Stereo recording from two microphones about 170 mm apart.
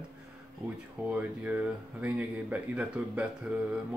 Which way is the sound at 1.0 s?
10° right (ahead or behind).